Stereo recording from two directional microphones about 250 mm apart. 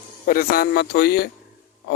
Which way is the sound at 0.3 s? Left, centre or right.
Left.